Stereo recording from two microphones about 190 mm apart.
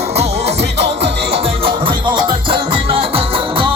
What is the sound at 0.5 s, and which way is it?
Music, 65° right (ahead or behind).